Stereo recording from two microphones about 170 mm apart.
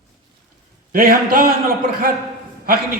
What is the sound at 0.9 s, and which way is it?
Speech, 60° right (ahead or behind).